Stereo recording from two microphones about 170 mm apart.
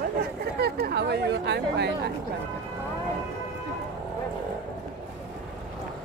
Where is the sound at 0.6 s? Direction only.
65° right (ahead or behind); by 2.0 s 85° right.